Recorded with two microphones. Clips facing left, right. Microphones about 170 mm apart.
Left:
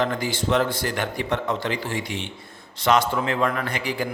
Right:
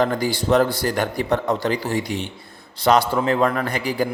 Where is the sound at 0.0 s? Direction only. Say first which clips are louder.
Right 4 dB; 35° right (ahead or behind).